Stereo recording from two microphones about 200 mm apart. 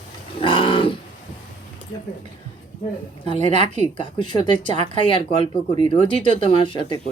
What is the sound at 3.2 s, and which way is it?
Speech, 25° left (ahead or behind).